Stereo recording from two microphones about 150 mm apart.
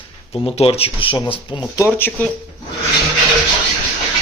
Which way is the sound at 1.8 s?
10° left (ahead or behind).